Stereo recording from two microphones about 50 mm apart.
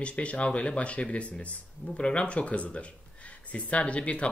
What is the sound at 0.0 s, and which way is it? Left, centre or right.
Speech, left.